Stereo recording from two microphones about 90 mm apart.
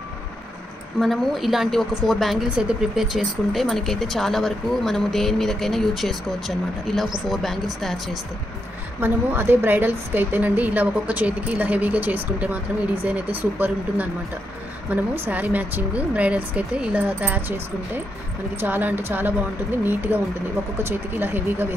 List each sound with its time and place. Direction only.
1.0 s speech: centre (ahead or behind)
9.0 s a woman's voice: 25° right (ahead or behind)